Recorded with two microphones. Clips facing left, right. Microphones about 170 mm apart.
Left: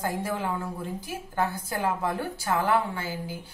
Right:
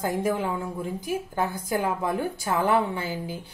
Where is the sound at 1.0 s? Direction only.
15° right (ahead or behind).